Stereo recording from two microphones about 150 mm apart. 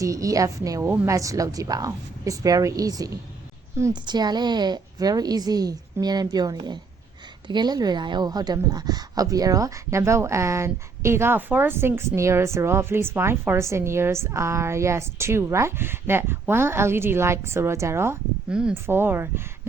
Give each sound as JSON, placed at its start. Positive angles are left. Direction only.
{"t": 0.0, "sound": "a woman's voice", "side_deg": -20}